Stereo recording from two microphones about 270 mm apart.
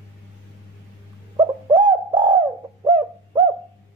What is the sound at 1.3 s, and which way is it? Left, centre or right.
Bird, centre.